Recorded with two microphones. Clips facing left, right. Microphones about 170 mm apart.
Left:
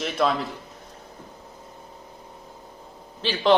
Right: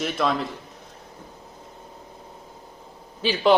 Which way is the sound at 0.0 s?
Centre (ahead or behind).